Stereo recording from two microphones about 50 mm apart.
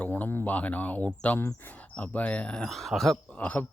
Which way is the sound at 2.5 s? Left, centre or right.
Centre.